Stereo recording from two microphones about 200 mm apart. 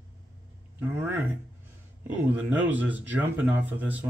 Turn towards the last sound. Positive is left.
turn(degrees=-10)  # may be behind; listen again after turning